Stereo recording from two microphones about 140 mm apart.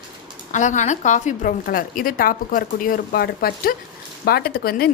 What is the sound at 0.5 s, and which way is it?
A woman's voice, 60° left (ahead or behind).